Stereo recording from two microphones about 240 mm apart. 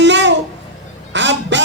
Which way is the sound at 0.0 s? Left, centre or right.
Right.